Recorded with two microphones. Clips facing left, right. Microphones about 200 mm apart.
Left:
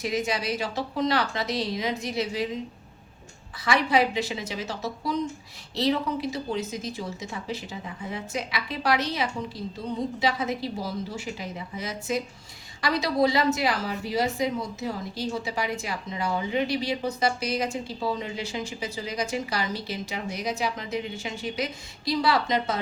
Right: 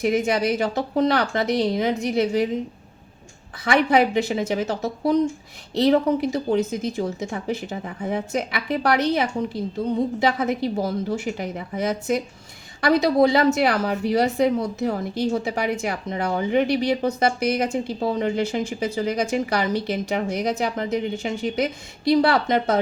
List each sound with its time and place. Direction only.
0.0 s a woman's voice: 55° right (ahead or behind)
3.6 s a woman's voice: 55° right (ahead or behind)